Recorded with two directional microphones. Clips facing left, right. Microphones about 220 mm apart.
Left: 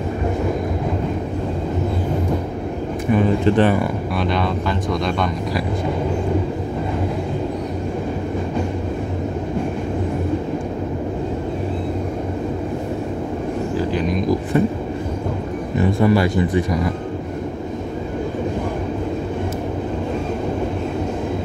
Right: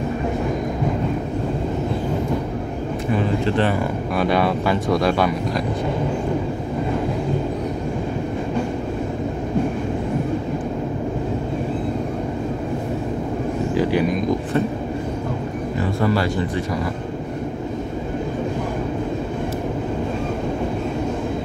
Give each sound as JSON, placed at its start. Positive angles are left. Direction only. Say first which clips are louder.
{"t": 4.2, "sound": "speech", "louder": "right 3 dB", "side_deg": -5}
{"t": 15.8, "sound": "speech", "louder": "left 5 dB", "side_deg": 15}